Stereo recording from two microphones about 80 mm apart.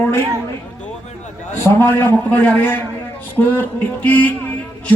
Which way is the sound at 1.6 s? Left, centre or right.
Left.